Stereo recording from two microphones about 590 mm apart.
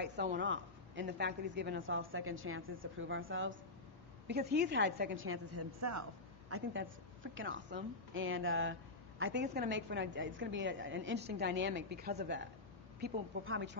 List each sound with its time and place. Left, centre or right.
0.0 s a woman's voice: centre